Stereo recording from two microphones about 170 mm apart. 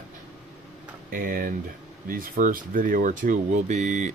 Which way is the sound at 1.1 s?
55° right (ahead or behind).